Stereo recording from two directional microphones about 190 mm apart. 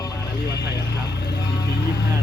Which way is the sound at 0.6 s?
60° left (ahead or behind).